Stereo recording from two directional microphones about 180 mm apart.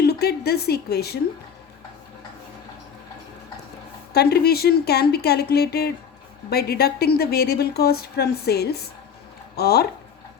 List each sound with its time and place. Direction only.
0.0 s speech: 60° left (ahead or behind)
4.1 s speech: 60° left (ahead or behind)